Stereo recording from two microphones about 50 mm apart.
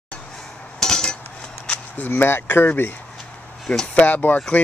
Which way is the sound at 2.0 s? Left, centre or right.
Left.